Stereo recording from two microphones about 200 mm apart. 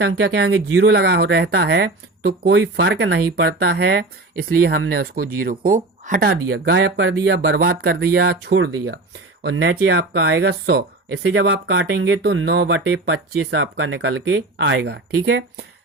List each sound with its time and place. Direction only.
0.0 s speech: 60° right (ahead or behind)
6.5 s speech: 60° right (ahead or behind)